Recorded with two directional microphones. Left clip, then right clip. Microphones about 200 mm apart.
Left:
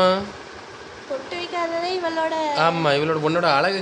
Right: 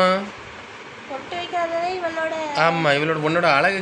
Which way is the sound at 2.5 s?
5° left (ahead or behind).